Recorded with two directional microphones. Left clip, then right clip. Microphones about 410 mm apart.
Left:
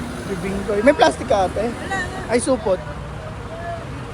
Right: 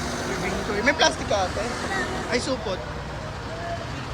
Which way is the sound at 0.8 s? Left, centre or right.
Centre.